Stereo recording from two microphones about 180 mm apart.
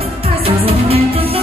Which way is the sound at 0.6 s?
30° right (ahead or behind).